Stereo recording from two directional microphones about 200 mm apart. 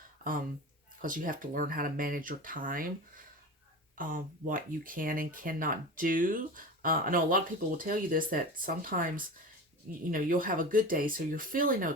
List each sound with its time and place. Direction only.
1.0 s speech: 45° right (ahead or behind)
3.9 s speech: 45° right (ahead or behind)